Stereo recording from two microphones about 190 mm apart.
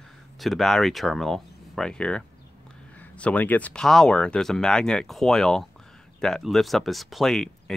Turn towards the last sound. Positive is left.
turn(degrees=0)  # may be behind; listen again after turning